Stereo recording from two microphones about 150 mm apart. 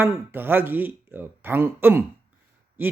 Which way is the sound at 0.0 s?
15° right (ahead or behind).